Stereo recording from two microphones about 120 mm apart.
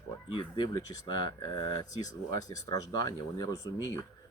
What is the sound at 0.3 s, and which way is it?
Speech, 40° left (ahead or behind).